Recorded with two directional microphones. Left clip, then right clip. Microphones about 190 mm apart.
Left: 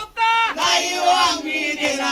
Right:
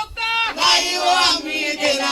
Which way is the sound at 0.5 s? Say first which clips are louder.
Right 2 dB; 50° right (ahead or behind).